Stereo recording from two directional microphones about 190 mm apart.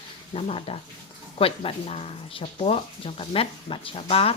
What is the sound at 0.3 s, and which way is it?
Speech, 30° left (ahead or behind).